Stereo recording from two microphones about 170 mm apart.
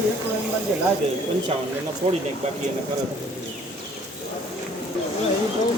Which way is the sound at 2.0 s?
45° right (ahead or behind).